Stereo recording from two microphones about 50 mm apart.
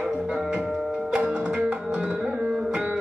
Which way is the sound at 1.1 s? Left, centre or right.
Right.